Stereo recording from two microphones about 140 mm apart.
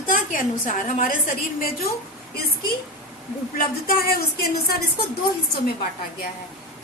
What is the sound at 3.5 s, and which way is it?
Speech, 90° left.